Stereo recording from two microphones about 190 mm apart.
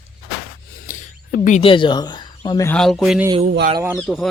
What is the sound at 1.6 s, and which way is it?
Speech, 25° left (ahead or behind).